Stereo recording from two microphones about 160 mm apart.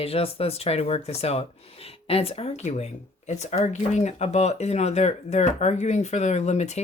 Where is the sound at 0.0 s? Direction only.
35° left (ahead or behind).